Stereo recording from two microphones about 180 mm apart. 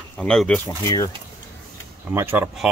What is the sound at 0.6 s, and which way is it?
Speech, 20° left (ahead or behind).